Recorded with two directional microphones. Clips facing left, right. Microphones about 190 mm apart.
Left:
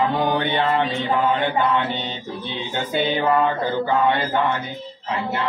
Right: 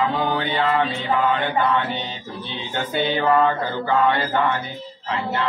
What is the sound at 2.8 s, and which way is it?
Mantra, 15° left (ahead or behind).